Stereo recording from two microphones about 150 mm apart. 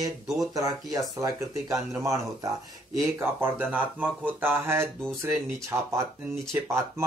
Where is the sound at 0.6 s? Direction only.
25° right (ahead or behind).